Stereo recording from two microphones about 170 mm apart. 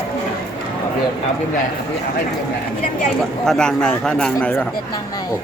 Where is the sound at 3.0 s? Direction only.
5° left (ahead or behind).